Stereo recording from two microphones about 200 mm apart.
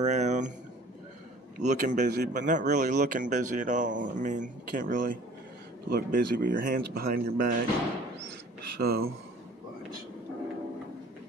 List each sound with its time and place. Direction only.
0.0 s a sound: 35° right (ahead or behind)
1.6 s speech: 40° right (ahead or behind)
8.7 s speech: 50° right (ahead or behind)